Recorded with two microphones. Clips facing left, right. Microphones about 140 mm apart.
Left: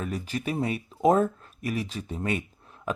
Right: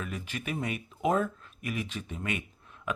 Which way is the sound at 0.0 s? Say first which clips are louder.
Left 6 dB; 35° left (ahead or behind).